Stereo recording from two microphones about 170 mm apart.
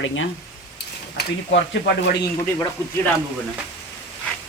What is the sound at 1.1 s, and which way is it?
Speech, 80° left.